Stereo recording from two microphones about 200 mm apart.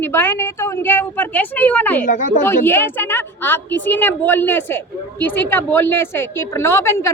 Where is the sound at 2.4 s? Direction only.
10° left (ahead or behind).